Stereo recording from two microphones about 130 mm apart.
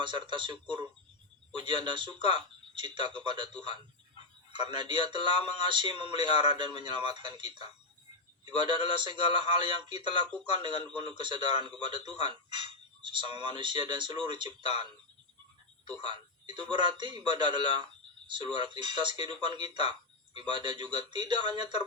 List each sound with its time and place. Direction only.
0.0 s a man's voice: 40° right (ahead or behind)
15.9 s a man's voice: 35° right (ahead or behind)